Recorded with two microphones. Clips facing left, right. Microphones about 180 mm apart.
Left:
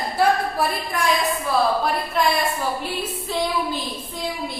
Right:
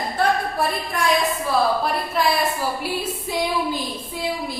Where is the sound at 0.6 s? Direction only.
Centre (ahead or behind).